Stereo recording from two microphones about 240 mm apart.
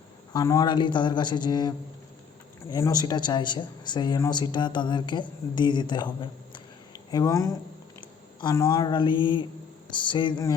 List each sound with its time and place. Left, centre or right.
0.3 s speech: centre
7.1 s speech: centre